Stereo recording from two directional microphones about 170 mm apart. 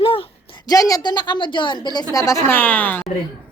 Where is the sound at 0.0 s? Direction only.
30° left (ahead or behind).